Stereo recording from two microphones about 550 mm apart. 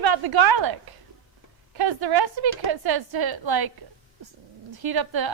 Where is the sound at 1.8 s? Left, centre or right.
Right.